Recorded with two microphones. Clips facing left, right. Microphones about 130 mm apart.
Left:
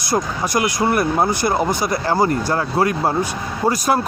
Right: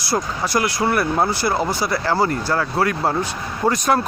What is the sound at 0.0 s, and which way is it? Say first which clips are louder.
Speech: left 2 dB; 15° left (ahead or behind).